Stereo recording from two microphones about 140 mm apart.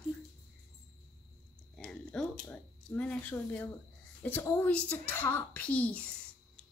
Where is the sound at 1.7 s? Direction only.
5° left (ahead or behind).